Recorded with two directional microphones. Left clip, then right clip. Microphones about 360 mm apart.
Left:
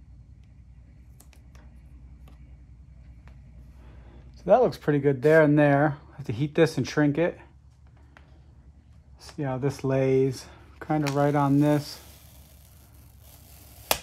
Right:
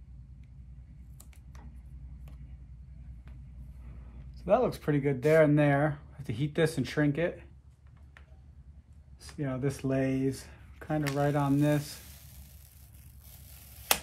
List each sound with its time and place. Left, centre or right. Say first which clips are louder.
4.4 s speech: left 6 dB; left
9.4 s speech: left 5 dB; centre